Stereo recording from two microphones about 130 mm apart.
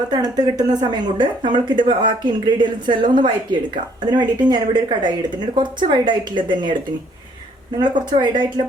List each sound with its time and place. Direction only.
0.1 s speech: 30° right (ahead or behind)
7.8 s speech: 35° right (ahead or behind)